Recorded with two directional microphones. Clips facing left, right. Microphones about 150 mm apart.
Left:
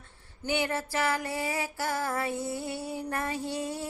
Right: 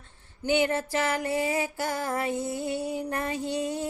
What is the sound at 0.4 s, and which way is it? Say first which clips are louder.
Music: right 5 dB; 20° right (ahead or behind).